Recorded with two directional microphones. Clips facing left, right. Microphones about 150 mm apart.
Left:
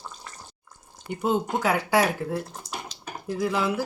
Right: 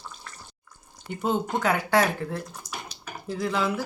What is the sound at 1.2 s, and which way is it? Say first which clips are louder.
Speech: left 1 dB; 10° left (ahead or behind).